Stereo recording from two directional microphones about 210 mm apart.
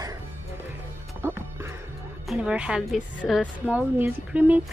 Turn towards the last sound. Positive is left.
turn(degrees=-10)  # may be behind; listen again after turning